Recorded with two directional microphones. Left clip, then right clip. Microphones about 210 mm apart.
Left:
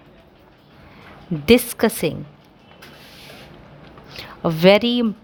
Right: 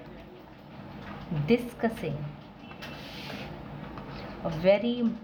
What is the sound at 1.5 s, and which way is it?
Speech, 55° left (ahead or behind).